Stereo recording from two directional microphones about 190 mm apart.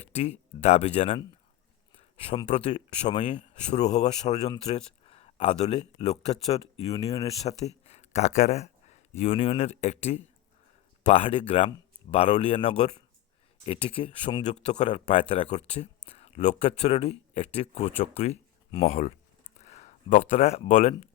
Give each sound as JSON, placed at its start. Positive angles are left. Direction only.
{"t": 0.0, "sound": "speech", "side_deg": 35}
{"t": 2.0, "sound": "a sound", "side_deg": 30}
{"t": 2.5, "sound": "speech", "side_deg": 35}